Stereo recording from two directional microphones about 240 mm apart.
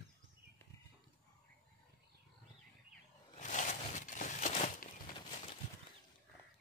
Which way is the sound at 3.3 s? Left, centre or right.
Left.